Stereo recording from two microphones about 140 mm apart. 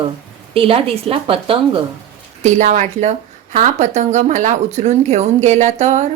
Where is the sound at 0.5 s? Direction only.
40° right (ahead or behind).